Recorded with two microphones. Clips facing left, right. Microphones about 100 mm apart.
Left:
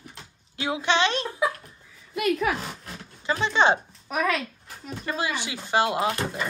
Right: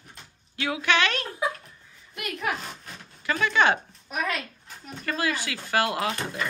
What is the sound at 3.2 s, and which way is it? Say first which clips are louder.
Speech: left 1 dB; 25° left (ahead or behind).